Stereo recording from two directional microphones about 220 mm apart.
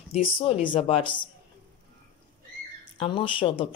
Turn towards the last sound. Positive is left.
turn(degrees=25)  # may be behind; listen again after turning